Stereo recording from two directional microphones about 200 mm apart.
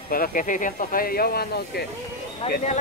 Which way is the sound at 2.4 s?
30° left (ahead or behind).